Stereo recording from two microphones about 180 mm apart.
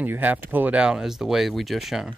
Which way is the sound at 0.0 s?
10° right (ahead or behind).